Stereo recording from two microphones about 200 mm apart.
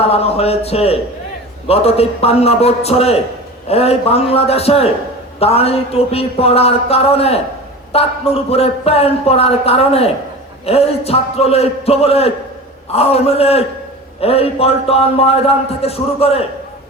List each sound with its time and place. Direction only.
0.0 s a man's voice: 30° left (ahead or behind)